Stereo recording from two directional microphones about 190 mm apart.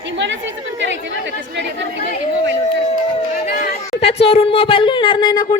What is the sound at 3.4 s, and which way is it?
Chatter, 45° left (ahead or behind).